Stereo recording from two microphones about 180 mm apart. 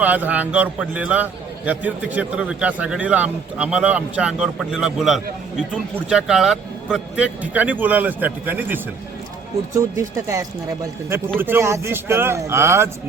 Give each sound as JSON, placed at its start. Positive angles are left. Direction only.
{"t": 0.0, "sound": "a man's voice", "side_deg": -10}
{"t": 9.9, "sound": "a man's voice", "side_deg": -15}